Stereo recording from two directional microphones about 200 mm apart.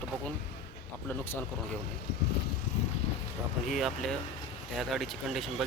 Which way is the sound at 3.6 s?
Centre (ahead or behind).